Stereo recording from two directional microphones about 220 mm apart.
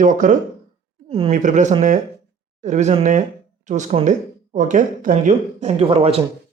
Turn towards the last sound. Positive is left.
turn(degrees=-25)  # may be behind; listen again after turning